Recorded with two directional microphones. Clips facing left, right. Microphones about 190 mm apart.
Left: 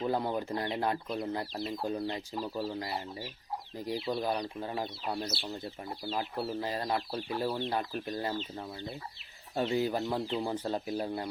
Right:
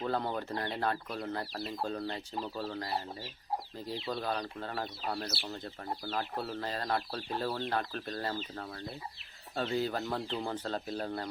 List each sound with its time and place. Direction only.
0.0 s speech: 15° left (ahead or behind)
9.6 s speech: 15° left (ahead or behind)